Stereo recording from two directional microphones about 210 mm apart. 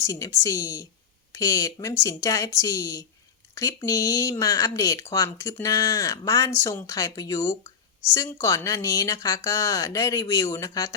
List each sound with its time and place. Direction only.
0.0 s speech: 15° left (ahead or behind)